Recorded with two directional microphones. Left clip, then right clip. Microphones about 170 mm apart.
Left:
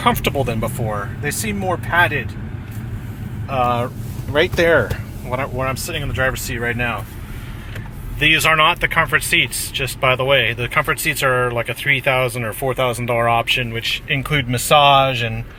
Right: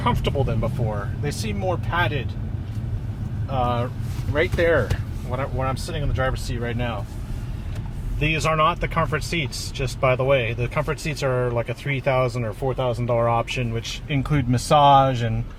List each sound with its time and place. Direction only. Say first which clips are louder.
0.0 s speech: left 6 dB; 25° left (ahead or behind)
3.5 s speech: left 6 dB; 30° left (ahead or behind)
6.1 s speech: left 6 dB; 25° left (ahead or behind)
6.7 s speech: left 8 dB; 10° left (ahead or behind)
8.2 s speech: left 7 dB; centre (ahead or behind); by 15.3 s 20° right (ahead or behind)